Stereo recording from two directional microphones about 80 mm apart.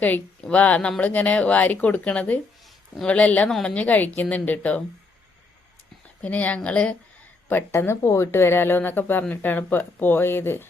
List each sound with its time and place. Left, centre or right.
0.5 s a woman's voice: centre
6.2 s speech: centre
7.4 s a woman's voice: left